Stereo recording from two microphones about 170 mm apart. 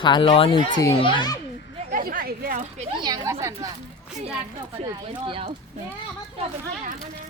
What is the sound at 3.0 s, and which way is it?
Speech, 20° right (ahead or behind).